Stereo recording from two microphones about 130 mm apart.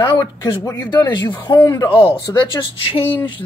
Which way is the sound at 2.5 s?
40° left (ahead or behind).